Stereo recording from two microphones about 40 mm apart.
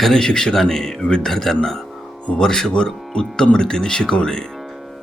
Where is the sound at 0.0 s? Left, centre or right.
Centre.